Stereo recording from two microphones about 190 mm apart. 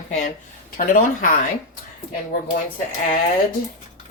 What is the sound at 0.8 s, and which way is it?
Speech, 45° left (ahead or behind).